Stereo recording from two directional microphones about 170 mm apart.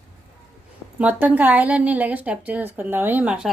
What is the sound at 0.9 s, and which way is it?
A woman's voice, 10° right (ahead or behind).